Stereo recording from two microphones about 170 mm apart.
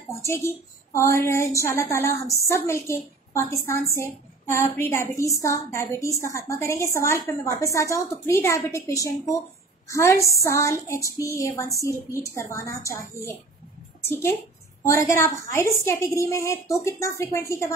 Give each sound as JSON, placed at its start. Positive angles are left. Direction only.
{"t": 0.2, "sound": "a woman's voice", "side_deg": 15}